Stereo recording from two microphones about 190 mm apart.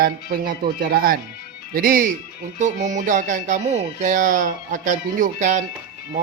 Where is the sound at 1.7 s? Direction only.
50° right (ahead or behind).